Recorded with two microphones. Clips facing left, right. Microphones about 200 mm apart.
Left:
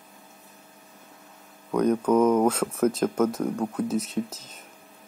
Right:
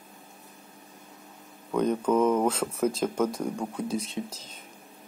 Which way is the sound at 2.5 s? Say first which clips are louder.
Left 3 dB; 10° right (ahead or behind).